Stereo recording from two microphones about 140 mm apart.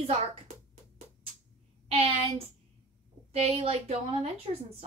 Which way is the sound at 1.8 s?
45° right (ahead or behind).